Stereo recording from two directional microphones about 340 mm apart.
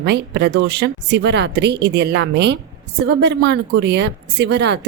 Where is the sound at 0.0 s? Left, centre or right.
Right.